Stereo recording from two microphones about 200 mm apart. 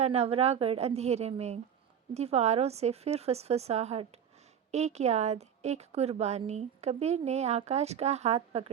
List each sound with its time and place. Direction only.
0.0 s a woman's voice: 30° right (ahead or behind)